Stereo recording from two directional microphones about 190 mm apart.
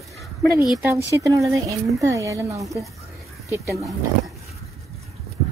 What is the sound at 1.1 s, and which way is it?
Speech, 15° right (ahead or behind).